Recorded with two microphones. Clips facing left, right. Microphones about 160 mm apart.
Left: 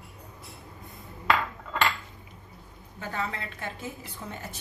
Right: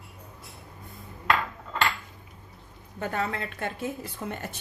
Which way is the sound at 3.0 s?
60° right (ahead or behind).